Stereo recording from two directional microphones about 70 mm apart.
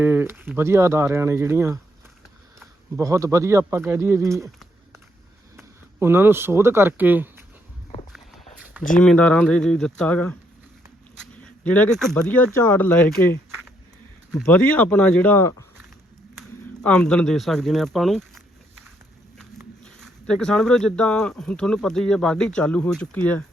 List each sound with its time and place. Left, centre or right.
0.0 s speech: right
3.0 s speech: right
5.5 s speech: right
6.9 s speech: right
9.0 s speech: centre
11.6 s speech: left
11.9 s speech: centre
12.5 s speech: left
14.4 s speech: left
16.8 s speech: centre
17.3 s speech: centre
19.8 s speech: centre